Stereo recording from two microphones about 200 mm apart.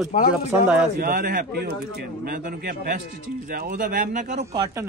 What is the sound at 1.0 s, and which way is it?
Speech, 50° right (ahead or behind).